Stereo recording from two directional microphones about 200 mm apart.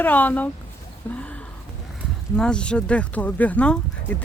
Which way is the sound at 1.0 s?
5° left (ahead or behind).